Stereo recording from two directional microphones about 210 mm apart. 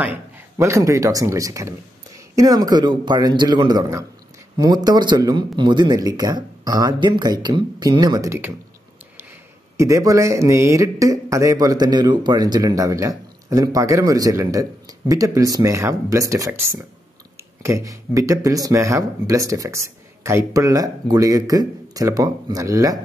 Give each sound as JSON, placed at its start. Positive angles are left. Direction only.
{"t": 0.6, "sound": "speech", "side_deg": -15}
{"t": 9.8, "sound": "speech", "side_deg": -15}